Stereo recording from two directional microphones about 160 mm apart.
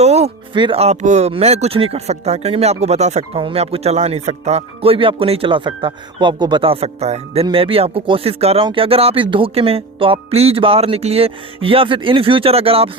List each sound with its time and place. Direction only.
0.0 s music: 45° right (ahead or behind)
0.5 s speech: 35° right (ahead or behind)